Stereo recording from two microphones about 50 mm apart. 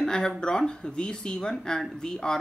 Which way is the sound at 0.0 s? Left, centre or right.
Centre.